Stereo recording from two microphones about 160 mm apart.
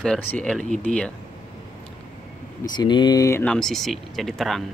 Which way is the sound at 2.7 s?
25° left (ahead or behind).